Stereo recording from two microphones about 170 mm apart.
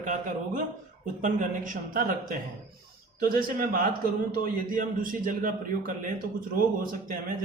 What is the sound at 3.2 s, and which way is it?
A man's voice, 60° right (ahead or behind).